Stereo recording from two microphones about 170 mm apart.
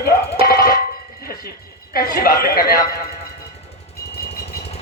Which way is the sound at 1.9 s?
60° left (ahead or behind).